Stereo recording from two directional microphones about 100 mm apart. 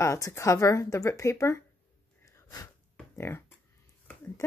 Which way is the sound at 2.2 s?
35° left (ahead or behind).